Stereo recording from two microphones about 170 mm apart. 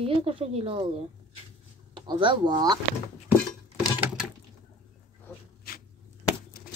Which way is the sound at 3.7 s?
5° right (ahead or behind).